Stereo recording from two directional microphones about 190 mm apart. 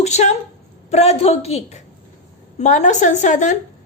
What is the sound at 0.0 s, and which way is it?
A woman's voice, 35° left (ahead or behind).